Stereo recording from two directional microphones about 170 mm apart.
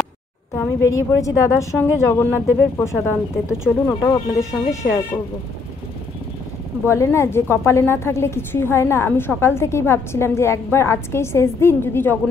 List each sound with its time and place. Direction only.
0.6 s a woman's voice: 20° left (ahead or behind)
6.9 s a woman's voice: 15° left (ahead or behind)